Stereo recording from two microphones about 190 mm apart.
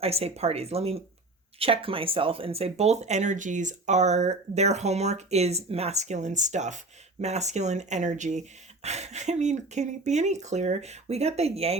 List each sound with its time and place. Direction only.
0.0 s speech: 30° right (ahead or behind)